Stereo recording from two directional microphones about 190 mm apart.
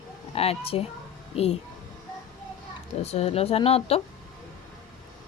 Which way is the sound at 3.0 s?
35° left (ahead or behind).